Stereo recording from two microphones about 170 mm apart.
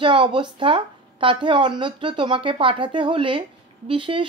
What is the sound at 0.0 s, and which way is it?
Speech, 30° right (ahead or behind).